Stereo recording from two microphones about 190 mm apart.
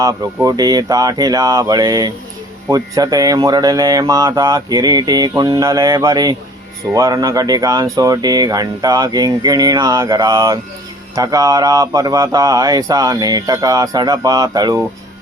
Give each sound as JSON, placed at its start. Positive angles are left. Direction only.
{"t": 0.0, "sound": "speech", "side_deg": -20}